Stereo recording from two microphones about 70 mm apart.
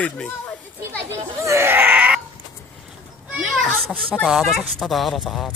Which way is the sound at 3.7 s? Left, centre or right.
Centre.